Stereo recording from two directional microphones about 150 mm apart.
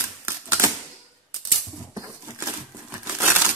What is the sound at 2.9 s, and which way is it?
Crumpling, 15° right (ahead or behind).